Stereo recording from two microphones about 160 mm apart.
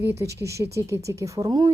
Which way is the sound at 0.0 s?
15° right (ahead or behind).